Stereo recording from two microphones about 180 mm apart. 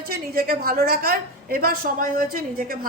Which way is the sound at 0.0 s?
55° right (ahead or behind).